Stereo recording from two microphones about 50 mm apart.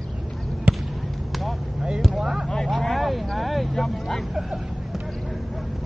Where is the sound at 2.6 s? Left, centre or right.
Centre.